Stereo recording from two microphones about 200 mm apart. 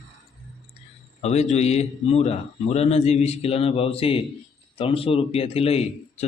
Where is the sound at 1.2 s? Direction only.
35° left (ahead or behind).